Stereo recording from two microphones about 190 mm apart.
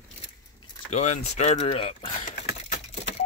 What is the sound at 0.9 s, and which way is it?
Speech, 35° left (ahead or behind).